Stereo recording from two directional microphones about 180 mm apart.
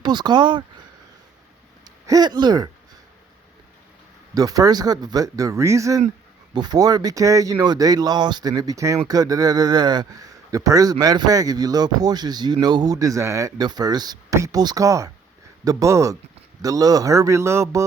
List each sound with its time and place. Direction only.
0.0 s speech: 25° right (ahead or behind)
4.4 s a man's voice: 20° right (ahead or behind)